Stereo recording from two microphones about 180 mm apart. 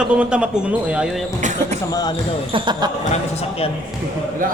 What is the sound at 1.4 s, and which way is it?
Speech, 45° right (ahead or behind).